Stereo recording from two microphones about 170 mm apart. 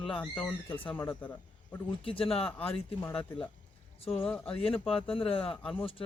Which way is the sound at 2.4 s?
5° left (ahead or behind).